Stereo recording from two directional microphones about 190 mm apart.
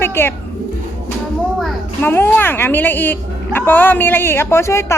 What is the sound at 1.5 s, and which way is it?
Speech, 5° left (ahead or behind).